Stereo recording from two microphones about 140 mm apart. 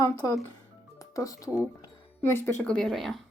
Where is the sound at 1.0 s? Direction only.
25° left (ahead or behind).